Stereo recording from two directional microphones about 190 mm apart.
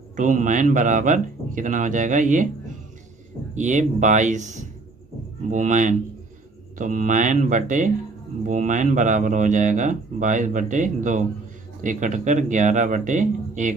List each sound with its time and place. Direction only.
0.1 s speech: 40° right (ahead or behind)
3.5 s speech: 40° right (ahead or behind)